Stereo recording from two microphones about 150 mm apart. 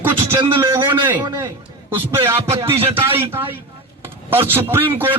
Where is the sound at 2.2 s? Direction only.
20° right (ahead or behind).